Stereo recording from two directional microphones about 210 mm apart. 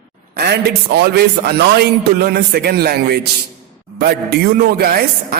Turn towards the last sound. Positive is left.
turn(degrees=-45)  # may be behind; listen again after turning